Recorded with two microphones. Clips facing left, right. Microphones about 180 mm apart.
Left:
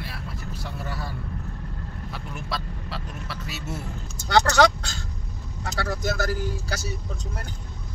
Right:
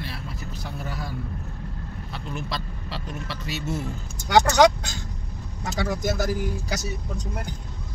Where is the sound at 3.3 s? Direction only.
5° left (ahead or behind).